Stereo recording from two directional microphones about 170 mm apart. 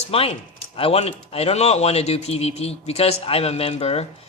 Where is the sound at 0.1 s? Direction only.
35° left (ahead or behind).